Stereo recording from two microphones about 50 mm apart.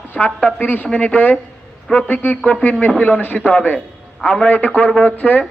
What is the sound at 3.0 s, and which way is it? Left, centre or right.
A woman's voice, left.